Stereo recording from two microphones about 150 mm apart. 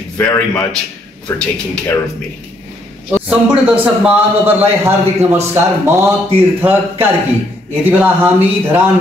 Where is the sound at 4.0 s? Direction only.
15° right (ahead or behind).